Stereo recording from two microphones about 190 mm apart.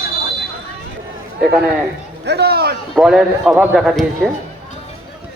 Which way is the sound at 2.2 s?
60° right (ahead or behind).